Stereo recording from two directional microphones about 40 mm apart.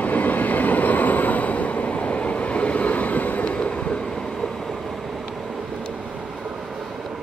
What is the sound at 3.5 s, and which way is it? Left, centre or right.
Train, left.